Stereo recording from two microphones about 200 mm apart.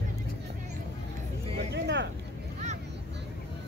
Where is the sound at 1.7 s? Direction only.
60° right (ahead or behind).